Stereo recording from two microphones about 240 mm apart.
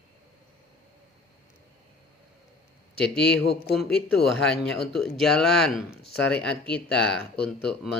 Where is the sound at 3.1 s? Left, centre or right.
Centre.